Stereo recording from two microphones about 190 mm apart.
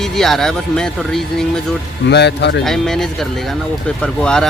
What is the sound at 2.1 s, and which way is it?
Speech, 65° left (ahead or behind).